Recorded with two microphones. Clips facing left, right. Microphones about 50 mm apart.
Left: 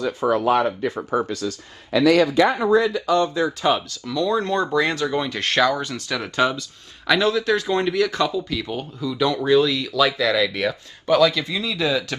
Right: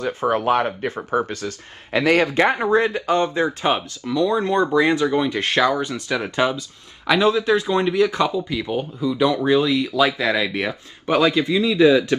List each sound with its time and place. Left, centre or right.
0.0 s speech: right